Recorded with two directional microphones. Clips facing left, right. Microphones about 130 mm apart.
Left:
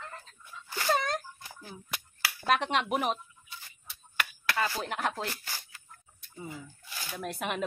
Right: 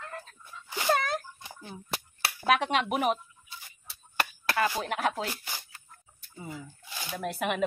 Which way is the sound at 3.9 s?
35° right (ahead or behind).